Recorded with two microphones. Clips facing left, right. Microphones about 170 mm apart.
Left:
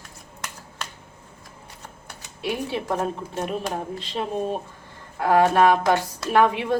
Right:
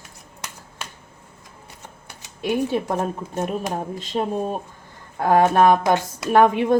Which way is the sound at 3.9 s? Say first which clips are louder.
Right 3 dB; 45° right (ahead or behind).